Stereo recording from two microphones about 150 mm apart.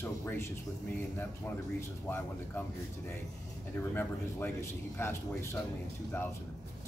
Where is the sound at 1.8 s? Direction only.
15° left (ahead or behind).